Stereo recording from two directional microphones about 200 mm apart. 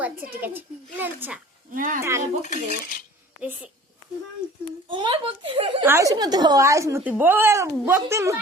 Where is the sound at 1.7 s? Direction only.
40° right (ahead or behind).